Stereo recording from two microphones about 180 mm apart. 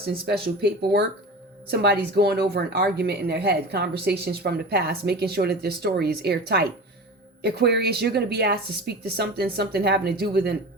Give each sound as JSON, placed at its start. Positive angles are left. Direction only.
{"t": 0.4, "sound": "speech", "side_deg": -60}